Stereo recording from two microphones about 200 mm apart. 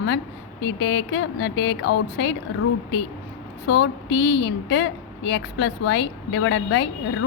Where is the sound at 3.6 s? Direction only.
65° left (ahead or behind).